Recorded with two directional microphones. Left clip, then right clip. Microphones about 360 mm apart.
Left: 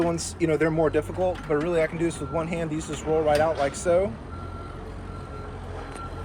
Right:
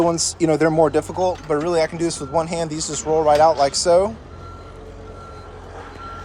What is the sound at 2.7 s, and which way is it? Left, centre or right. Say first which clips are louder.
Speech: right 5 dB; right.